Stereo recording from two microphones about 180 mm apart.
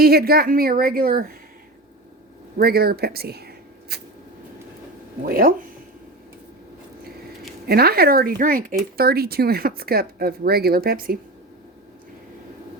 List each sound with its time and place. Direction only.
0.0 s speech: 60° right (ahead or behind)
2.6 s speech: 60° right (ahead or behind)
5.2 s speech: 55° right (ahead or behind)
7.7 s speech: 60° right (ahead or behind)